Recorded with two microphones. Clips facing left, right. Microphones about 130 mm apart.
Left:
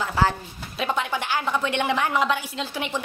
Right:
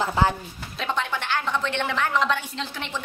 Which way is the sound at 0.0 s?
20° right (ahead or behind).